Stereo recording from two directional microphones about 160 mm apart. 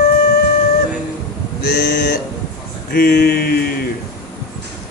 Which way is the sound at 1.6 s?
75° left (ahead or behind).